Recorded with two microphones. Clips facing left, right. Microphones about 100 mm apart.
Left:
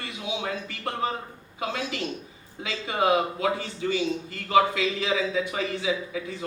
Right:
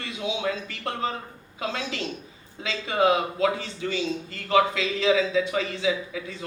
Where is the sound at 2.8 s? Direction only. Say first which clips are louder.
Right 1 dB; 25° left (ahead or behind).